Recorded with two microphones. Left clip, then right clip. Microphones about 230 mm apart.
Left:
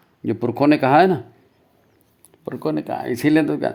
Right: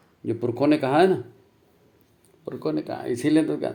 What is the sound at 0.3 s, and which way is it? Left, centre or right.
Speech, left.